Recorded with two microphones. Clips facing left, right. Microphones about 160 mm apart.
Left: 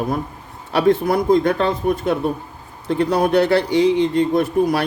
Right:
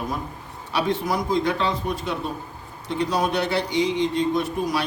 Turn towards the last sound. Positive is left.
turn(degrees=60)  # may be behind; listen again after turning